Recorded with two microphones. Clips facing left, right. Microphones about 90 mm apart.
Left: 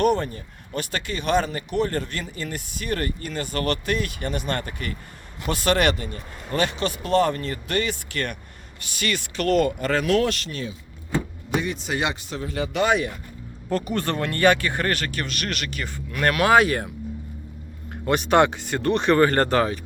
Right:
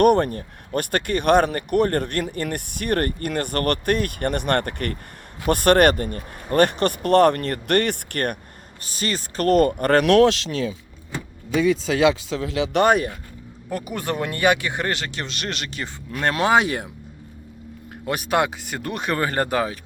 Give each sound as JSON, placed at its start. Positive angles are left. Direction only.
{"t": 0.0, "sound": "speech", "side_deg": -55}
{"t": 8.8, "sound": "speech", "side_deg": -35}
{"t": 11.9, "sound": "speech", "side_deg": -90}
{"t": 12.8, "sound": "speech", "side_deg": -45}
{"t": 13.7, "sound": "speech", "side_deg": -10}
{"t": 18.0, "sound": "speech", "side_deg": -5}